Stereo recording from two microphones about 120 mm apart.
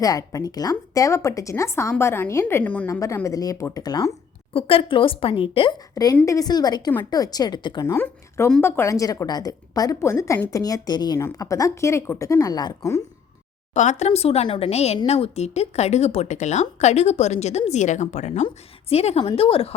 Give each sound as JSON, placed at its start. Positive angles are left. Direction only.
{"t": 0.0, "sound": "a woman's voice", "side_deg": 30}
{"t": 2.9, "sound": "a woman's voice", "side_deg": 25}
{"t": 4.5, "sound": "a woman's voice", "side_deg": 50}
{"t": 5.9, "sound": "speech", "side_deg": 30}
{"t": 7.9, "sound": "a woman's voice", "side_deg": 20}
{"t": 13.7, "sound": "speech", "side_deg": 80}
{"t": 14.7, "sound": "speech", "side_deg": 65}
{"t": 18.4, "sound": "a woman's voice", "side_deg": 60}